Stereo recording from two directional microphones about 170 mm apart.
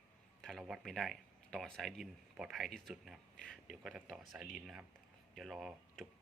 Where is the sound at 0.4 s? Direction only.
Centre (ahead or behind).